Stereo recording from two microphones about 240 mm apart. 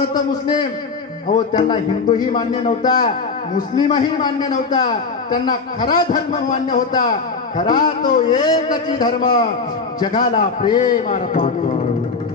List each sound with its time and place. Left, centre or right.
0.1 s a man's voice: centre
3.0 s a man's voice: left
3.7 s a man's voice: centre
10.8 s a man's voice: left